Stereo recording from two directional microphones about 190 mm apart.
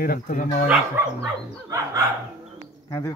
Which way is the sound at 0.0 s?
45° left (ahead or behind).